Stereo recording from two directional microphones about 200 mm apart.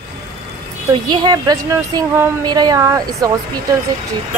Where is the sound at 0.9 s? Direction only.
20° right (ahead or behind).